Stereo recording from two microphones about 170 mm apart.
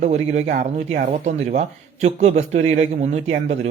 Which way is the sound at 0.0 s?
40° right (ahead or behind).